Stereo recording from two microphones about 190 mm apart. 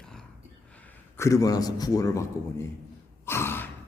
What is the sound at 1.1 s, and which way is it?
A man's voice, 15° left (ahead or behind).